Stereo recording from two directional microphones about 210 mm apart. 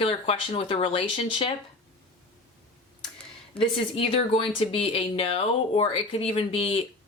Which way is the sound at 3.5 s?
25° left (ahead or behind).